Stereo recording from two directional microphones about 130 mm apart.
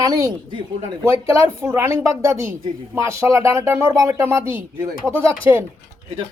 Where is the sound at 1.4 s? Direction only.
20° right (ahead or behind).